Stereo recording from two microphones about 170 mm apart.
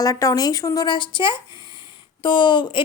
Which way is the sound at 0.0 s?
20° left (ahead or behind).